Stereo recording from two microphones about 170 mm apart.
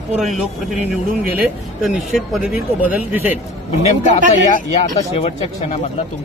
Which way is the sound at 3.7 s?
40° left (ahead or behind).